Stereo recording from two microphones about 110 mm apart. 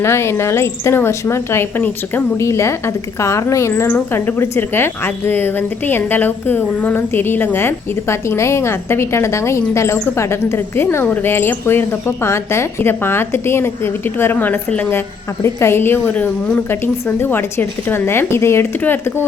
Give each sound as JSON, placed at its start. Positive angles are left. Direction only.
{"t": 0.0, "sound": "a woman's voice", "side_deg": 25}